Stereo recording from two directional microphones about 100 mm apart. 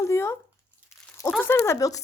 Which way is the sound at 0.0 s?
30° left (ahead or behind).